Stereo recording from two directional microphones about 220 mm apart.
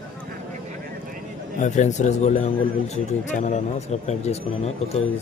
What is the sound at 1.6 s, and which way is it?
Speech, 35° left (ahead or behind).